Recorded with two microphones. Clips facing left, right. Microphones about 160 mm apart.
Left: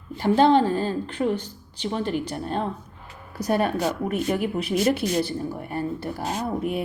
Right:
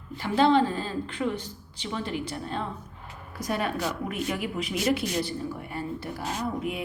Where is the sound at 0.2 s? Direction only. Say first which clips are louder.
Left 4 dB; 45° left (ahead or behind).